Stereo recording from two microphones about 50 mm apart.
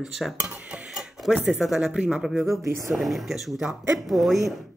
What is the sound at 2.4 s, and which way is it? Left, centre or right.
Speech, right.